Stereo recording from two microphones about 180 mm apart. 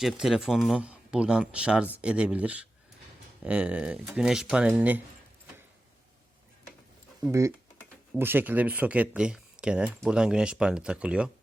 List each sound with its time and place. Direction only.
0.0 s speech: centre (ahead or behind)
7.3 s speech: 15° right (ahead or behind)